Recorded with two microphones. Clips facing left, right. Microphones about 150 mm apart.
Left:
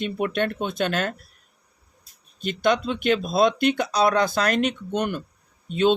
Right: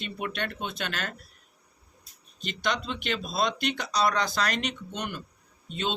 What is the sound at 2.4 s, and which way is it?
Speech, 50° left (ahead or behind).